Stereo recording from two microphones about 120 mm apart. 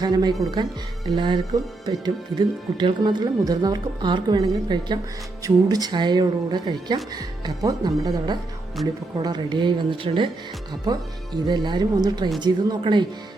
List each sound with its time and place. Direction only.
0.0 s a woman's voice: 35° right (ahead or behind)
10.9 s a woman's voice: 35° right (ahead or behind)